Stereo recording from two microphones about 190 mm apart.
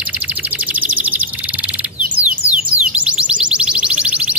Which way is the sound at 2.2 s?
5° right (ahead or behind).